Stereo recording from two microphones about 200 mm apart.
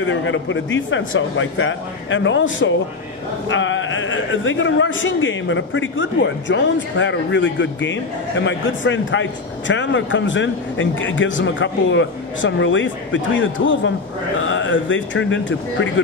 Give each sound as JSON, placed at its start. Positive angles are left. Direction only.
{"t": 0.0, "sound": "a man's voice", "side_deg": 70}